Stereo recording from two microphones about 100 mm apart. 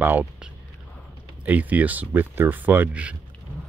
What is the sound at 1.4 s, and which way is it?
Speech, 15° right (ahead or behind).